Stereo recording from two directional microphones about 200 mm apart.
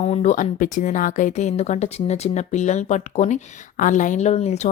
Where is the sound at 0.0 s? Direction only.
35° left (ahead or behind).